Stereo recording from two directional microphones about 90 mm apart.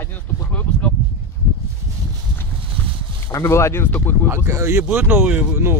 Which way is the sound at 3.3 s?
35° left (ahead or behind).